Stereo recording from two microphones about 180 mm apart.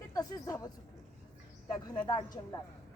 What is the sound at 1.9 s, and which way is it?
Speech, 25° left (ahead or behind).